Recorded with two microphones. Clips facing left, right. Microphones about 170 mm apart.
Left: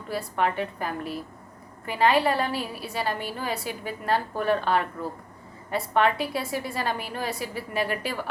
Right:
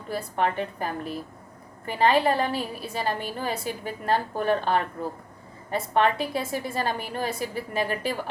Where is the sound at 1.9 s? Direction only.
50° right (ahead or behind).